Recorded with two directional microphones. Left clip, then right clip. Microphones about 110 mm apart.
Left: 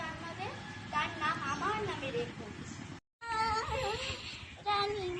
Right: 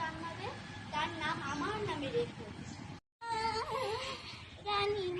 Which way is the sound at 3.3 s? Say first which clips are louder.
Left 3 dB; 25° right (ahead or behind).